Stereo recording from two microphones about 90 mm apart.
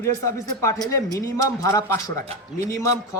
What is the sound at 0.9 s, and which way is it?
Speech, 35° left (ahead or behind).